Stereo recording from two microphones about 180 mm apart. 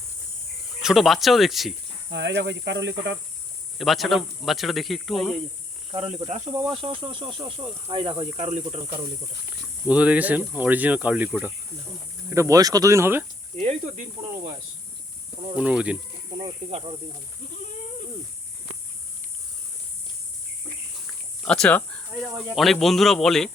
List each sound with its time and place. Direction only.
0.8 s speech: centre (ahead or behind)
2.0 s speech: 75° right (ahead or behind)
3.8 s speech: centre (ahead or behind)
5.9 s speech: 30° right (ahead or behind)
6.7 s speech: 25° right (ahead or behind)
9.5 s speech: 5° right (ahead or behind)
12.3 s speech: 15° right (ahead or behind)
13.6 s speech: 40° right (ahead or behind)
15.5 s speech: 5° right (ahead or behind)
16.4 s speech: 30° right (ahead or behind)
21.4 s speech: 5° left (ahead or behind)